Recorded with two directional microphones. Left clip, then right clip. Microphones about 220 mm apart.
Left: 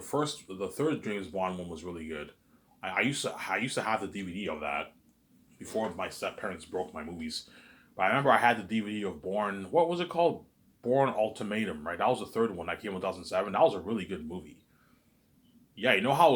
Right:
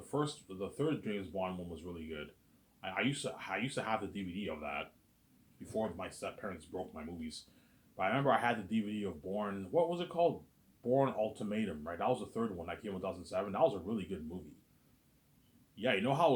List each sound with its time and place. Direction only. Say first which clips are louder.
0.1 s speech: left 6 dB; 25° left (ahead or behind)
15.7 s speech: left 7 dB; 20° left (ahead or behind)